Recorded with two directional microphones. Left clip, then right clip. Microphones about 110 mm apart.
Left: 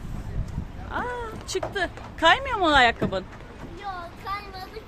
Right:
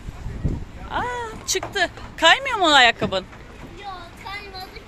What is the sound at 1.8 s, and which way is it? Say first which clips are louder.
Speech: right 6 dB; 5° left (ahead or behind).